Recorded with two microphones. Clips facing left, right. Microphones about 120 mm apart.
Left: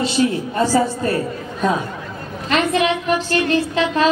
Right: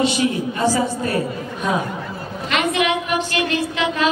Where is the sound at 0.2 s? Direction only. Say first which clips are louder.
Left 2 dB; 40° left (ahead or behind).